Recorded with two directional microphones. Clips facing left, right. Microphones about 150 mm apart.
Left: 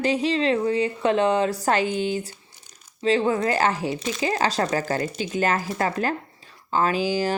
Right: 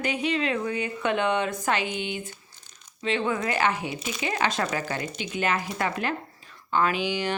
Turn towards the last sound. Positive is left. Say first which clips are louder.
# left 4 dB
turn(degrees=40)  # may be behind; listen again after turning